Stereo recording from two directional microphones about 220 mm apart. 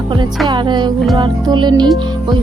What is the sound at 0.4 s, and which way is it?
Music, 20° right (ahead or behind).